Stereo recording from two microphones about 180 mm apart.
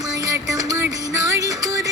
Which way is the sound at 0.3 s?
20° right (ahead or behind).